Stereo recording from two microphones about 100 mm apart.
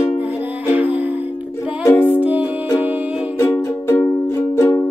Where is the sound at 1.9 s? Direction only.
20° left (ahead or behind).